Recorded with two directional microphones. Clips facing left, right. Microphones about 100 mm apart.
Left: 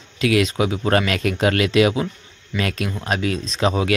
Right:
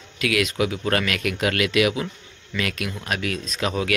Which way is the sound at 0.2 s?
30° left (ahead or behind).